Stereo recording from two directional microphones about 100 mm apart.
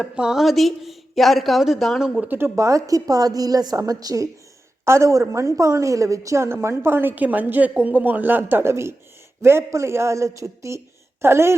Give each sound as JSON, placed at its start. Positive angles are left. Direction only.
{"t": 0.0, "sound": "a woman's voice", "side_deg": -5}
{"t": 2.2, "sound": "a woman's voice", "side_deg": -20}
{"t": 2.6, "sound": "a woman's voice", "side_deg": -30}